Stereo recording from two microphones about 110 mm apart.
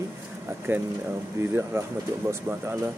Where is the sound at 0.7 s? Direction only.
20° right (ahead or behind).